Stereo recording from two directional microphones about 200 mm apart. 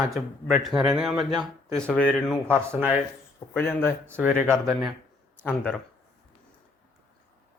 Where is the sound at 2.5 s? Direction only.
10° right (ahead or behind).